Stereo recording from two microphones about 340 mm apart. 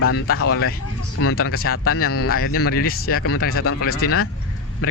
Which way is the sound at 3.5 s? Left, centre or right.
Left.